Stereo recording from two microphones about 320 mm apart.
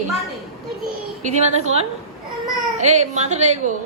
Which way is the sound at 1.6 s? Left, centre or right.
Centre.